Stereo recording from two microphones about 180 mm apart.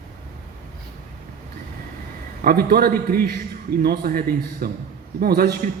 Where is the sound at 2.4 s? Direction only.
60° right (ahead or behind).